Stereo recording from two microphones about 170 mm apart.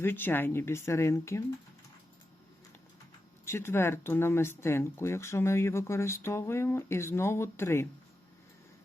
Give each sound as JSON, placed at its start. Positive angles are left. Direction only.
{"t": 0.0, "sound": "speech", "side_deg": 10}
{"t": 3.4, "sound": "speech", "side_deg": 15}